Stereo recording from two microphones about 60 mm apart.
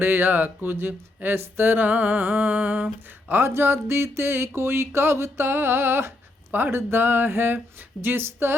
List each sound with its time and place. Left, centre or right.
0.0 s speech: right
3.2 s a sound: right
6.5 s speech: right